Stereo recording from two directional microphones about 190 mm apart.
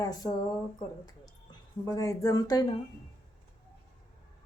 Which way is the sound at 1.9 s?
15° left (ahead or behind).